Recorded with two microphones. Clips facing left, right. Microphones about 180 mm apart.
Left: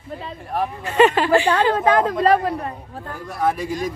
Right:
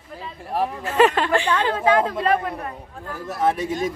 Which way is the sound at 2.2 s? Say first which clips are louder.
Left 4 dB; 35° left (ahead or behind).